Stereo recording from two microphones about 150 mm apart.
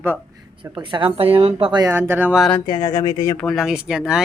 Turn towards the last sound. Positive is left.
turn(degrees=-5)  # may be behind; listen again after turning